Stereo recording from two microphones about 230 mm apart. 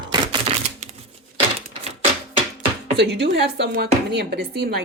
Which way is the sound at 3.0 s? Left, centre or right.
Right.